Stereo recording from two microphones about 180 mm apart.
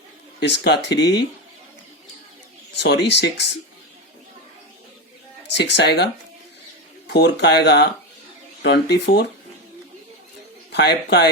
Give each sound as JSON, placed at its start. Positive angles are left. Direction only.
{"t": 0.3, "sound": "speech", "side_deg": 75}
{"t": 2.7, "sound": "speech", "side_deg": 70}
{"t": 5.5, "sound": "speech", "side_deg": 70}
{"t": 7.1, "sound": "speech", "side_deg": 70}
{"t": 10.7, "sound": "speech", "side_deg": 70}